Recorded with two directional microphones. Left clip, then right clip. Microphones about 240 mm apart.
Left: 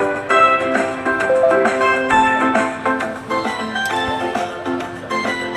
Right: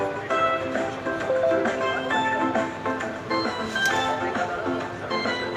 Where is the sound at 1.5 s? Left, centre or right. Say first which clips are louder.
Left 9 dB; left.